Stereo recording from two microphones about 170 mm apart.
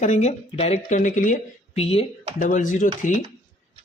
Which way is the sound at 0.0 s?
45° left (ahead or behind).